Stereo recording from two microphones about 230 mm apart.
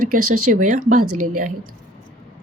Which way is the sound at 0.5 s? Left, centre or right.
Right.